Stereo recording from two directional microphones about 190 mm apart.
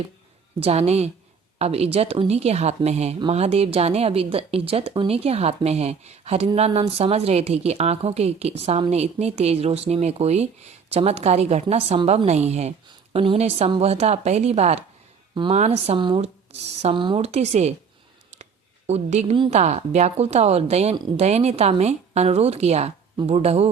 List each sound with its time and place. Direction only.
0.6 s speech: 35° right (ahead or behind)
18.9 s speech: 35° right (ahead or behind)